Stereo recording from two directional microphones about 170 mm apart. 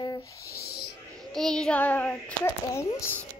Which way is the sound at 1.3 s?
5° left (ahead or behind).